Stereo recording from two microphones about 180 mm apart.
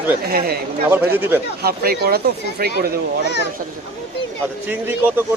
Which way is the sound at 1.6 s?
60° right (ahead or behind).